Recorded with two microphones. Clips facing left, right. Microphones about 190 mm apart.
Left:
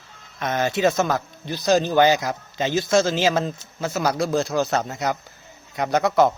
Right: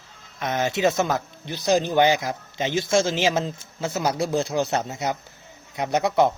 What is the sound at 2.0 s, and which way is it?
Speech, 15° right (ahead or behind).